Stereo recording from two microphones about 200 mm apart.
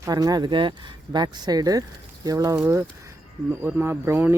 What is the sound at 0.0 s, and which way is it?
Speech, 20° right (ahead or behind).